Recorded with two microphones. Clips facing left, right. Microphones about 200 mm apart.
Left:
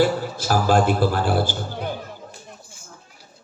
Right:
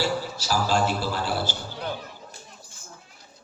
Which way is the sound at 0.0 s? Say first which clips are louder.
Left 7 dB; 55° left (ahead or behind).